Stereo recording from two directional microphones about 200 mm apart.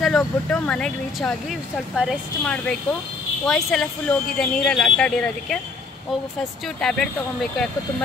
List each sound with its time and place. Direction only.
0.0 s speech: 5° left (ahead or behind)
6.8 s speech: 5° left (ahead or behind)